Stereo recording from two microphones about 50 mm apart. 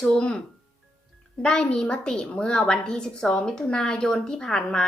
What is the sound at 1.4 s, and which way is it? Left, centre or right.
A child's voice, centre.